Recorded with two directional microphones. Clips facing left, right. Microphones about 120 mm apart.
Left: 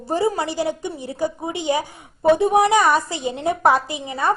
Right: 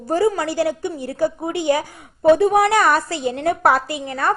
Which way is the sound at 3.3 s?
20° left (ahead or behind).